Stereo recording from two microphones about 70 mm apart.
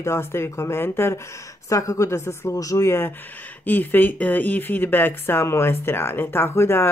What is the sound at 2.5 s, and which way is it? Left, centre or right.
Speech, left.